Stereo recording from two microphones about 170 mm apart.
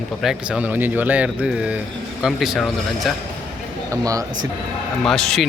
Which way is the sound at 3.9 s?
20° right (ahead or behind).